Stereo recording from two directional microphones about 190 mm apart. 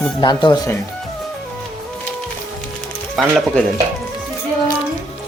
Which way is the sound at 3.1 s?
Centre (ahead or behind).